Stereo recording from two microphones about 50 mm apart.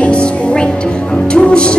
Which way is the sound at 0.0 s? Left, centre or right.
Left.